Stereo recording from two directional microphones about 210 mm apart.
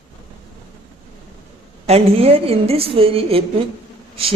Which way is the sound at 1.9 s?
30° right (ahead or behind).